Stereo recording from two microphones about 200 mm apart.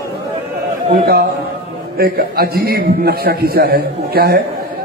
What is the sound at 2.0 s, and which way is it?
A man's voice, 50° right (ahead or behind).